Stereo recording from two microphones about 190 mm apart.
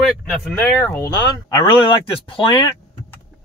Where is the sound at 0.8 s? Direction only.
15° left (ahead or behind).